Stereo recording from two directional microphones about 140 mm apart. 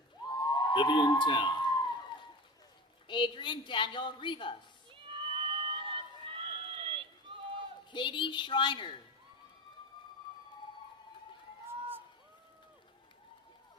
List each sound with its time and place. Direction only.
0.3 s crowd: 30° left (ahead or behind)
3.1 s a woman's voice: 35° left (ahead or behind)
4.9 s run: 40° right (ahead or behind)
7.9 s a woman's voice: 35° left (ahead or behind)
11.7 s a sound: 15° right (ahead or behind)